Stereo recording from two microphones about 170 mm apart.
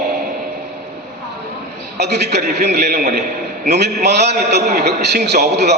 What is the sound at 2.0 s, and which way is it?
A man's voice, 80° right.